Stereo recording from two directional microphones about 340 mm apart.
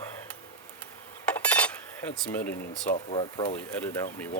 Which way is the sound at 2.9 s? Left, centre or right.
Centre.